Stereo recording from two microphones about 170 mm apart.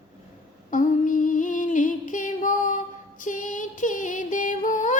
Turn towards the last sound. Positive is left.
turn(degrees=50)  # may be behind; listen again after turning